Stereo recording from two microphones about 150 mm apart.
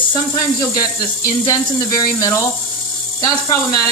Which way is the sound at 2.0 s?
25° left (ahead or behind).